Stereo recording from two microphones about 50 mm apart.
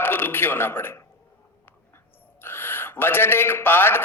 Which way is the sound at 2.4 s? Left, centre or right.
Left.